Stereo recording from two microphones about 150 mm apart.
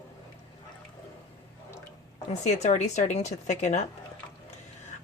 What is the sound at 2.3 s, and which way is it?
A woman's voice, 50° left (ahead or behind).